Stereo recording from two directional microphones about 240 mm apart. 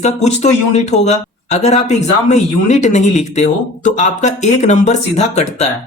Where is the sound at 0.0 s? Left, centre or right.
Left.